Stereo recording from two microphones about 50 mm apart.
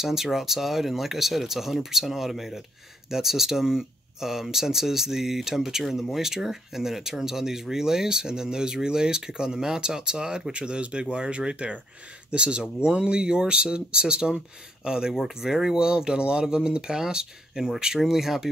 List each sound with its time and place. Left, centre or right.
0.0 s speech: centre